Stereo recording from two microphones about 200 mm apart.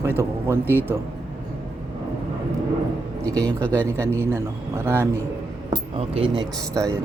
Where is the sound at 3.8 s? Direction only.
15° right (ahead or behind).